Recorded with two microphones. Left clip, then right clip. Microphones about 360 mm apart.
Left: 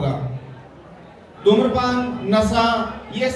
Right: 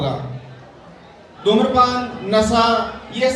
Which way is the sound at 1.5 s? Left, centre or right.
Right.